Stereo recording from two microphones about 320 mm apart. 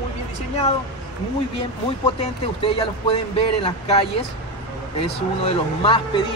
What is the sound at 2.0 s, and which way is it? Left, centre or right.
Speech, centre.